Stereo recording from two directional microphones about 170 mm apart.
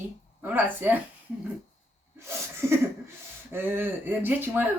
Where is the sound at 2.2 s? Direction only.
15° right (ahead or behind).